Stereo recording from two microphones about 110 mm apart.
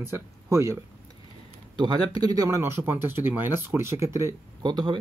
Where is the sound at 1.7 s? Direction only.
40° right (ahead or behind).